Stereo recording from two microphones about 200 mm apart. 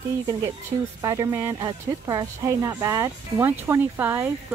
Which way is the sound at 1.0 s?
15° right (ahead or behind).